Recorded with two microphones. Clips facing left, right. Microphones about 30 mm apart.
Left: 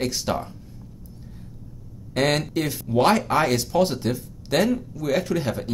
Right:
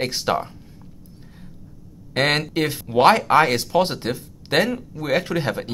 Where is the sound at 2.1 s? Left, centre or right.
Right.